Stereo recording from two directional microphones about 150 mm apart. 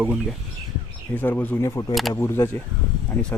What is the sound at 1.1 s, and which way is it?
Speech, 15° left (ahead or behind).